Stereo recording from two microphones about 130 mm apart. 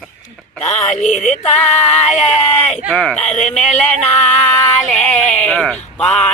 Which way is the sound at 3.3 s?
65° left (ahead or behind).